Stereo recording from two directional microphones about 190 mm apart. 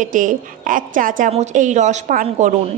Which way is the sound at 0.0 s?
45° right (ahead or behind).